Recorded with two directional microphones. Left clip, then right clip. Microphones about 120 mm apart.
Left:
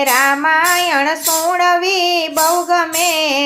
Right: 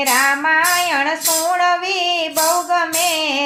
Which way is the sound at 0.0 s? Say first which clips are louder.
Left 2 dB; 40° left (ahead or behind).